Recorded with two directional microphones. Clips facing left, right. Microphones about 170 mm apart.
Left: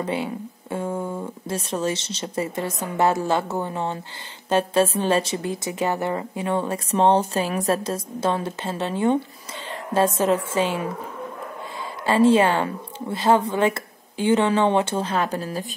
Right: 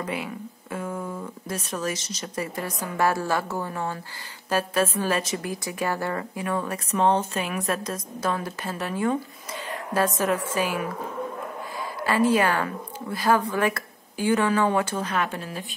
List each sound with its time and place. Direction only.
0.0 s a woman's voice: 30° left (ahead or behind)
12.0 s a woman's voice: 25° left (ahead or behind)